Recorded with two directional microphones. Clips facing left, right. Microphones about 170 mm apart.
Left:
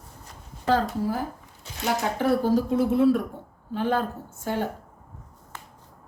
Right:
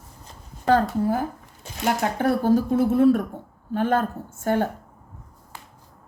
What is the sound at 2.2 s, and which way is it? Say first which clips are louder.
A woman's voice: right 2 dB; 50° right (ahead or behind).